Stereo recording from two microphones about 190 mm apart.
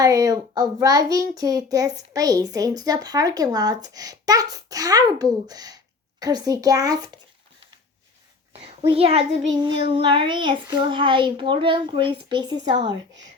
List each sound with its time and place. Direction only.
0.0 s a child's voice: 20° right (ahead or behind)
8.9 s a child's voice: 30° right (ahead or behind)